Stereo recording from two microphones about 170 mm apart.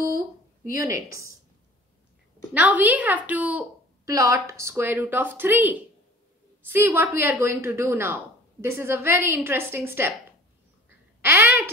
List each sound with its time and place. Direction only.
0.7 s speech: 15° right (ahead or behind)
2.5 s a woman's voice: 10° right (ahead or behind)
11.1 s speech: 10° right (ahead or behind)